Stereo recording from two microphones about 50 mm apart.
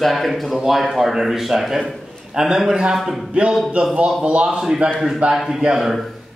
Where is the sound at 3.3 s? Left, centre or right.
Centre.